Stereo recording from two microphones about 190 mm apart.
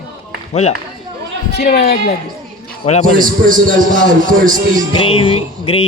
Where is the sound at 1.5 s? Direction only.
50° left (ahead or behind).